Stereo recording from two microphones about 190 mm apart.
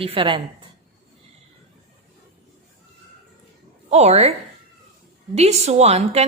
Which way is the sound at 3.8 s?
35° right (ahead or behind).